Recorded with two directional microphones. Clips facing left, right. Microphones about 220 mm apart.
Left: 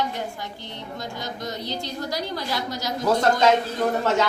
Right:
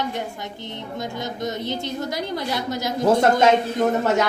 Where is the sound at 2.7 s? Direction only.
55° right (ahead or behind).